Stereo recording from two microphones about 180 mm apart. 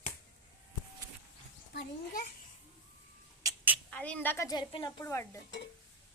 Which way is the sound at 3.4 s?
10° right (ahead or behind).